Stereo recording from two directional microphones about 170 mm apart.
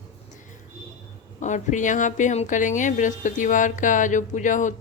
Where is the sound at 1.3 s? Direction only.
45° left (ahead or behind).